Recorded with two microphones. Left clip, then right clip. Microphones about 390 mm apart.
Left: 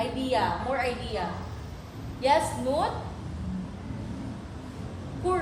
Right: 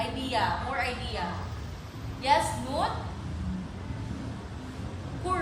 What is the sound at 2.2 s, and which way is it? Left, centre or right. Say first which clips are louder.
Speech: left 2 dB; centre.